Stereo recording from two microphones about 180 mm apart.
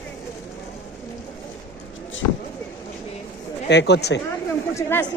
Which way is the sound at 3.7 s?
70° left (ahead or behind).